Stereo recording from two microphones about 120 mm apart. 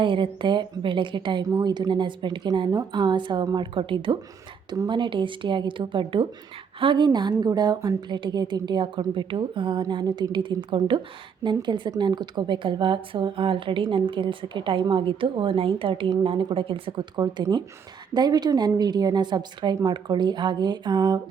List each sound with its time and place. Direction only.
0.0 s a woman's voice: 45° right (ahead or behind)